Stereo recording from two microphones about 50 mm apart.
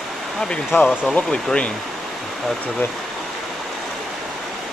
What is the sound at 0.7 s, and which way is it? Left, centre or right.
Speech, left.